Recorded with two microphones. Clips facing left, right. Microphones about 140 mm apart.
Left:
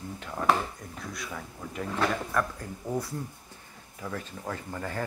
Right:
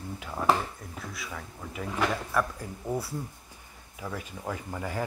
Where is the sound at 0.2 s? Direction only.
5° right (ahead or behind).